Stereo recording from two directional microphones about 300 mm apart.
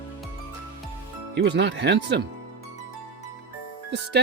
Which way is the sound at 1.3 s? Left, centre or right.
Right.